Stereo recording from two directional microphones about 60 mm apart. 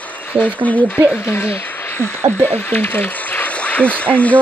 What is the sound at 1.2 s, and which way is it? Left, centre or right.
Speech, left.